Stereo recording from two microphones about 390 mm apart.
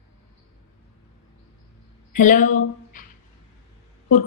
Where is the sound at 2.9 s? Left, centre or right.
Centre.